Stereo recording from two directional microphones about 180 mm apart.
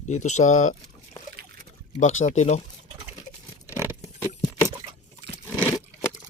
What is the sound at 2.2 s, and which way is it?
Speech, 40° left (ahead or behind).